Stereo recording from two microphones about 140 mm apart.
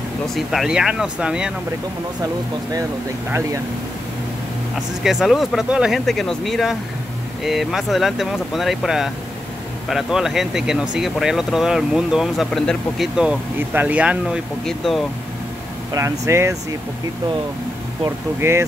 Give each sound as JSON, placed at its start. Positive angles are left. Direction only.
{"t": 0.3, "sound": "speech", "side_deg": 0}
{"t": 3.3, "sound": "speech", "side_deg": -20}
{"t": 5.0, "sound": "speech", "side_deg": 0}
{"t": 15.9, "sound": "speech", "side_deg": -20}
{"t": 18.0, "sound": "speech", "side_deg": -20}